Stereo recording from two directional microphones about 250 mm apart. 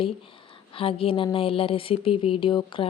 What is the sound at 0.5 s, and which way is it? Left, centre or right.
A woman's voice, left.